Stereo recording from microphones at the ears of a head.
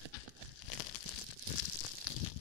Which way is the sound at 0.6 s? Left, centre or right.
Left.